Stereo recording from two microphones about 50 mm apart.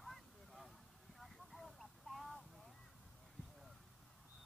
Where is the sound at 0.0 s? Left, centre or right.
Centre.